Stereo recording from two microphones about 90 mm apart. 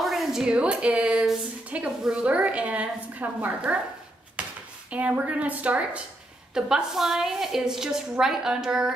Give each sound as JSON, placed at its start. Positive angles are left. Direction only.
{"t": 0.0, "sound": "a woman's voice", "side_deg": 0}
{"t": 4.4, "sound": "a sound", "side_deg": -15}
{"t": 4.9, "sound": "a woman's voice", "side_deg": -15}